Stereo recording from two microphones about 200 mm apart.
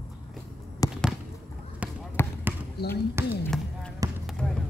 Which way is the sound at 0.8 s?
20° left (ahead or behind).